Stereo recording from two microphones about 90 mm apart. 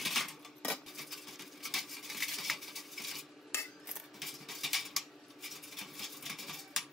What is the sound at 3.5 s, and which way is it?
Cutlery, 30° left (ahead or behind).